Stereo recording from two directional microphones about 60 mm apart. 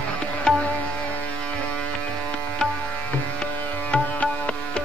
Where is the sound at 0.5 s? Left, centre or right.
Centre.